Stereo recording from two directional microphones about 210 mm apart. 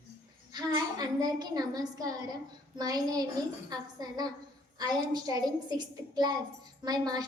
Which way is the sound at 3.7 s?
20° right (ahead or behind).